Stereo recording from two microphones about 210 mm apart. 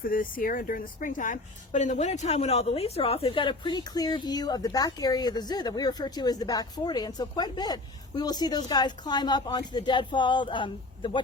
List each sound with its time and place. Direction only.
0.0 s speech: 40° left (ahead or behind); by 11.2 s 25° left (ahead or behind)